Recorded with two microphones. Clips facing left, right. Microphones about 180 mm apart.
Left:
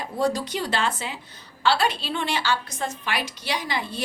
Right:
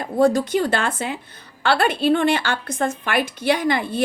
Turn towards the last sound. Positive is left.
turn(degrees=-55)  # may be behind; listen again after turning